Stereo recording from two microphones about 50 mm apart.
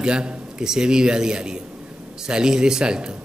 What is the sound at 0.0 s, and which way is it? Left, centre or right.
Speech, centre.